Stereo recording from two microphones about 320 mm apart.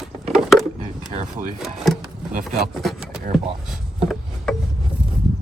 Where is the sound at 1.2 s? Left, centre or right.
Centre.